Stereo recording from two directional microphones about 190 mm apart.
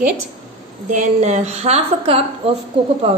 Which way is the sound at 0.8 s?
40° right (ahead or behind).